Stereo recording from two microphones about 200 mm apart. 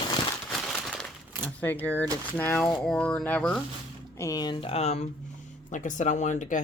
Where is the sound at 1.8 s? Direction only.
10° left (ahead or behind).